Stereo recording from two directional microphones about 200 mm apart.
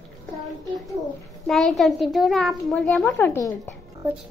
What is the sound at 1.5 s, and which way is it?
A child's voice, centre (ahead or behind).